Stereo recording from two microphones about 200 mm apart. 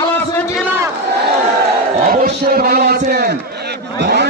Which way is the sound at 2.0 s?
45° right (ahead or behind).